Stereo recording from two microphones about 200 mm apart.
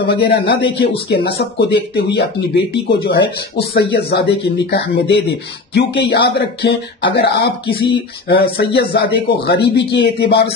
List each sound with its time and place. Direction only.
0.0 s speech: 55° left (ahead or behind)